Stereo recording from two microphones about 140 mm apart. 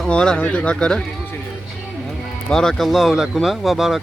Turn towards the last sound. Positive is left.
turn(degrees=0)  # may be behind; listen again after turning